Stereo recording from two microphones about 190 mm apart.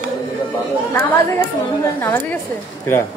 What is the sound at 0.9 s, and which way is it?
Speech, 15° left (ahead or behind).